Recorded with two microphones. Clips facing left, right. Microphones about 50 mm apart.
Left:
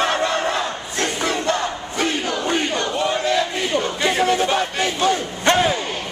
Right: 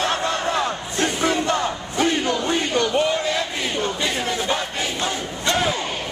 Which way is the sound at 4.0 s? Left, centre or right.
Left.